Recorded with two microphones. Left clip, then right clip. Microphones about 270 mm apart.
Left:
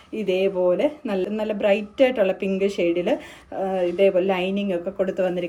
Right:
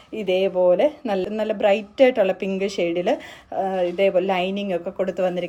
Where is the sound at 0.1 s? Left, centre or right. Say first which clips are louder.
Right 1 dB; right.